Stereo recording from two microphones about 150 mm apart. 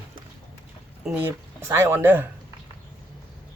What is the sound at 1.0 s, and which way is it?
Speech, 10° right (ahead or behind).